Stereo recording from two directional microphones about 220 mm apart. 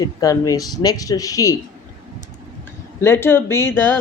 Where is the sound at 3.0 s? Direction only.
10° left (ahead or behind).